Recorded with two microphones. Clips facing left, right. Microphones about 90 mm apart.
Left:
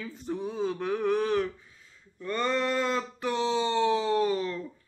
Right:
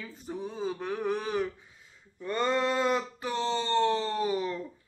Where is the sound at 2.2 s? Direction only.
20° right (ahead or behind).